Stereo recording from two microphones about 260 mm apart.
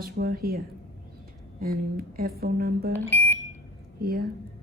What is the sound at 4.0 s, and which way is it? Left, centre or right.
Speech, right.